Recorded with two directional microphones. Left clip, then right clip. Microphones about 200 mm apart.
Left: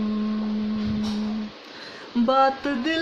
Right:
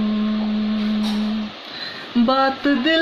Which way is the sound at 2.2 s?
10° left (ahead or behind).